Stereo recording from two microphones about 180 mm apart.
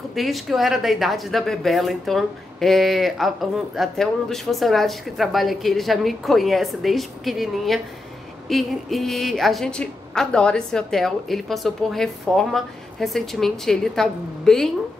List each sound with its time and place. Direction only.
0.1 s speech: centre (ahead or behind)